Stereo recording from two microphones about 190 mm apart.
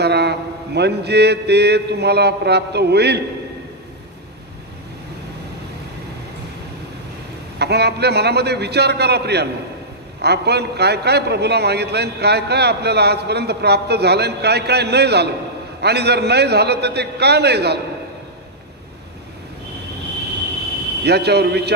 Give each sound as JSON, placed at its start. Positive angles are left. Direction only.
{"t": 0.0, "sound": "a man's voice", "side_deg": -60}
{"t": 7.6, "sound": "a man's voice", "side_deg": -60}
{"t": 21.0, "sound": "a man's voice", "side_deg": -60}